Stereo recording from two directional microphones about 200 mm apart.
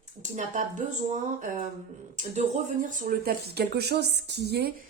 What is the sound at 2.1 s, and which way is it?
Speech, 40° right (ahead or behind).